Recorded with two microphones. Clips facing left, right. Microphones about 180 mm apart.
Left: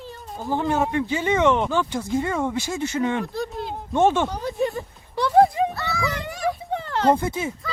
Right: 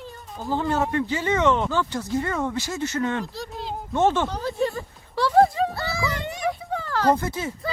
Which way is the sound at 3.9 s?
15° left (ahead or behind).